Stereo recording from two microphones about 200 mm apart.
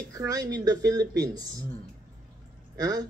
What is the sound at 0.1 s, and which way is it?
Speech, 20° right (ahead or behind).